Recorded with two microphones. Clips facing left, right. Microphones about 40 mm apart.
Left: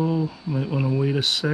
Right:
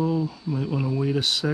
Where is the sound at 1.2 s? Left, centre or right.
Centre.